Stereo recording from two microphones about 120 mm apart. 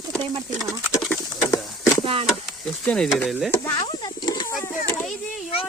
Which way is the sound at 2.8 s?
10° left (ahead or behind).